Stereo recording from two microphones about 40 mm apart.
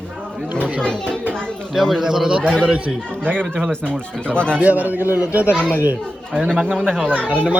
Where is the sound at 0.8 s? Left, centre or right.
Left.